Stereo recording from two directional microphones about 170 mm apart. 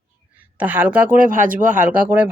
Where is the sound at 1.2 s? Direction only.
50° right (ahead or behind).